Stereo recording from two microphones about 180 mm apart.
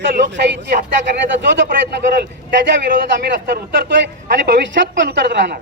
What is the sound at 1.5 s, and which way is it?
A man's voice, 65° right (ahead or behind).